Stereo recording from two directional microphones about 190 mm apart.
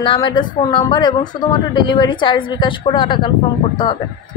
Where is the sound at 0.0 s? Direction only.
25° left (ahead or behind).